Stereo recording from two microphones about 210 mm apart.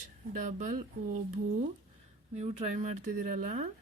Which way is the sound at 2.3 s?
30° right (ahead or behind).